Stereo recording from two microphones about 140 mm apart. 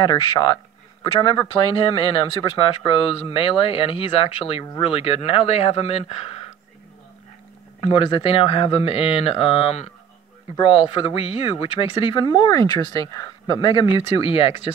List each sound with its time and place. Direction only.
0.0 s speech: 35° left (ahead or behind)
7.8 s speech: 40° left (ahead or behind)